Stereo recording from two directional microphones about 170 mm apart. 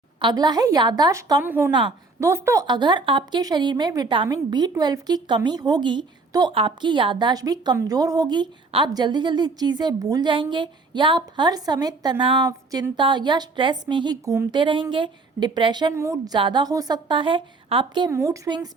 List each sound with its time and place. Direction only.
0.2 s a woman's voice: 25° right (ahead or behind)
1.5 s a woman's voice: 15° right (ahead or behind); by 18.1 s 30° right (ahead or behind)
18.1 s a woman's voice: 20° right (ahead or behind)